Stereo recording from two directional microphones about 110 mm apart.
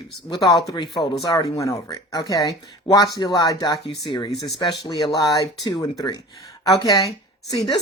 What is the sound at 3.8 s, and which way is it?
Speech, 50° left (ahead or behind).